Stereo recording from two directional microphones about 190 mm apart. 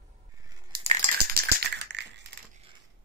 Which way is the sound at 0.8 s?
35° right (ahead or behind).